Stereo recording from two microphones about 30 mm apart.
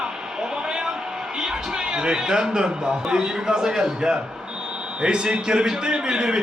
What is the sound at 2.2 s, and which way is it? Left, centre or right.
A man's voice, right.